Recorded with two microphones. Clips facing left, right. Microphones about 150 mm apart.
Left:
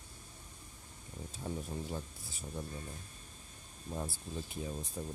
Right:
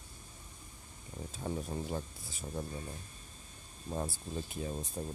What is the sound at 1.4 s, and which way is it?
Speech, 55° right (ahead or behind).